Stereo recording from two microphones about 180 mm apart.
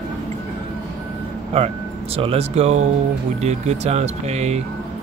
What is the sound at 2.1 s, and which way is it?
Speech, 35° right (ahead or behind).